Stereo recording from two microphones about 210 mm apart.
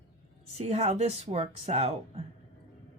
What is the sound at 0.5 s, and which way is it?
A woman's voice, 30° right (ahead or behind).